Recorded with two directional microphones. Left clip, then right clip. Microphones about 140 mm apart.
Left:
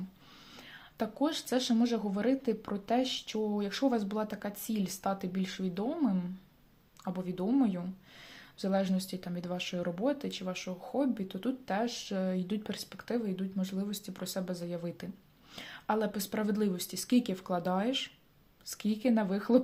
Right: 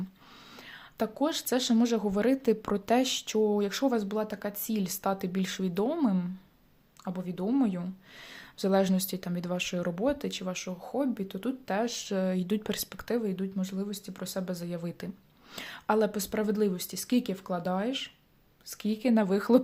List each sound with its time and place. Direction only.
0.5 s speech: 25° right (ahead or behind)
7.0 s speech: 15° right (ahead or behind)
8.3 s speech: 30° right (ahead or behind)